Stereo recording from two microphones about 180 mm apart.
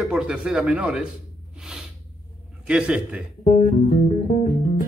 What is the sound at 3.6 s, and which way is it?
Music, 45° left (ahead or behind).